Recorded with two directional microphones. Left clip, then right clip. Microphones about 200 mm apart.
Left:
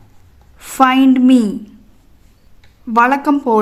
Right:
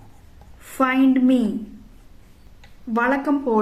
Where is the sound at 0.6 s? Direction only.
50° left (ahead or behind).